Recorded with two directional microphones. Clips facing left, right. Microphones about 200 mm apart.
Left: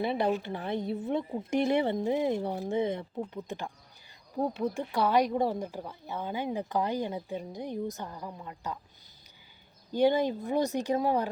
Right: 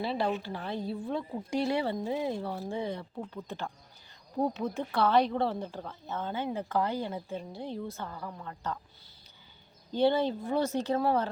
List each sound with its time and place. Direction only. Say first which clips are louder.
0.0 s a woman's voice: left 3 dB; 20° left (ahead or behind)
9.9 s a woman's voice: left 1 dB; 15° left (ahead or behind)